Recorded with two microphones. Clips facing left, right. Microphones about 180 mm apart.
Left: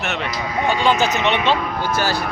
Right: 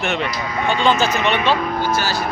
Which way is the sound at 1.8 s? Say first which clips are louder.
Even; 55° left (ahead or behind).